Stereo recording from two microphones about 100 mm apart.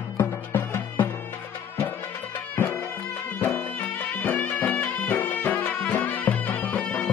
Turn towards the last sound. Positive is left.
turn(degrees=15)  # may be behind; listen again after turning